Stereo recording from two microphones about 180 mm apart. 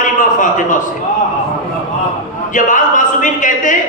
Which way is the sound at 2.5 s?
45° left (ahead or behind).